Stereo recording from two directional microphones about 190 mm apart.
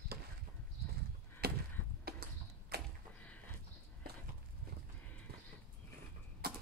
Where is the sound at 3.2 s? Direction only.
10° left (ahead or behind).